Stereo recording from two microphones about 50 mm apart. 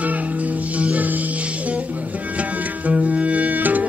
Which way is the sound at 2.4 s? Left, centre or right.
Right.